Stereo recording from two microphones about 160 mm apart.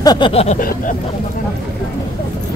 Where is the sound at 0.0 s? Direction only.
25° left (ahead or behind).